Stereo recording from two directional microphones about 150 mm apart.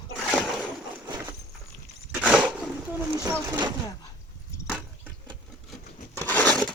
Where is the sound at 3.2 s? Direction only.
20° right (ahead or behind).